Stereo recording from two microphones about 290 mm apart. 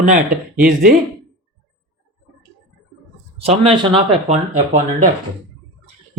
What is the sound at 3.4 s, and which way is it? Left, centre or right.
Speech, centre.